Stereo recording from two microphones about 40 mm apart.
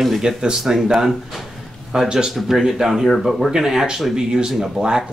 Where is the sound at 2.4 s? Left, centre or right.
Centre.